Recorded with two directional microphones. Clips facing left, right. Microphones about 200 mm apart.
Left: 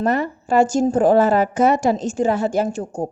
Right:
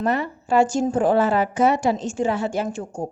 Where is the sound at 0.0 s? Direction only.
45° left (ahead or behind).